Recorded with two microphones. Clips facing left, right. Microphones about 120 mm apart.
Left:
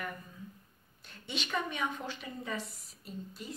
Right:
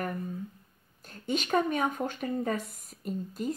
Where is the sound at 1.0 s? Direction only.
45° right (ahead or behind).